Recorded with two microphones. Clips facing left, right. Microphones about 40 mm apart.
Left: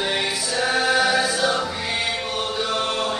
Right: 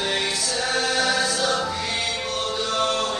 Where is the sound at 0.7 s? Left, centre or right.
Centre.